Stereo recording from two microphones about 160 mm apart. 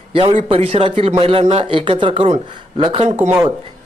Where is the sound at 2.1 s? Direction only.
45° right (ahead or behind).